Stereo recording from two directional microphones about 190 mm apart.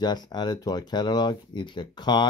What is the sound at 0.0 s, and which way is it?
Speech, 20° left (ahead or behind).